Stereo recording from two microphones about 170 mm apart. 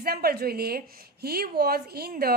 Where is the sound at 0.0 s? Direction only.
65° right (ahead or behind).